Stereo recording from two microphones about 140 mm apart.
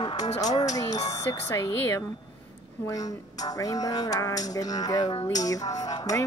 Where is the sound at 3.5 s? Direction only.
25° left (ahead or behind).